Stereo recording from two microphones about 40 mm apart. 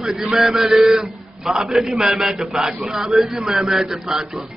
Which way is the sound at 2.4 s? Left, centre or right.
Right.